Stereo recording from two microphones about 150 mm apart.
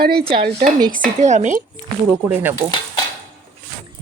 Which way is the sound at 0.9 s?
60° right (ahead or behind).